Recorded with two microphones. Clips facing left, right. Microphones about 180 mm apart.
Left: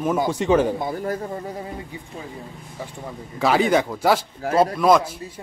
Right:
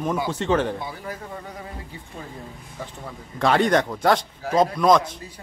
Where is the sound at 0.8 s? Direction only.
45° left (ahead or behind).